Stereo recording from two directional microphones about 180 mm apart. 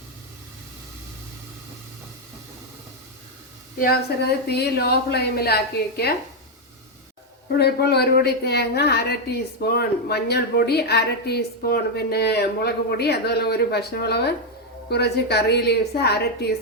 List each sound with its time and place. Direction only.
3.8 s a woman's voice: 60° left (ahead or behind)
7.6 s a woman's voice: 65° left (ahead or behind)